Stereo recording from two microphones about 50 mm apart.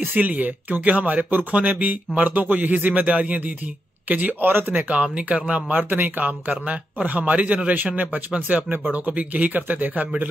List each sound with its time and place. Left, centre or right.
0.1 s speech: right
4.5 s speech: right
5.0 s speech: right
5.7 s speech: right